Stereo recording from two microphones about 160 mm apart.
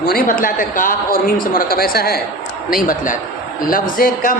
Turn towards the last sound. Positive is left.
turn(degrees=60)  # may be behind; listen again after turning